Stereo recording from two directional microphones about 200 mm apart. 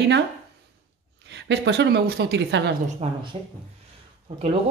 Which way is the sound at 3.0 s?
30° right (ahead or behind).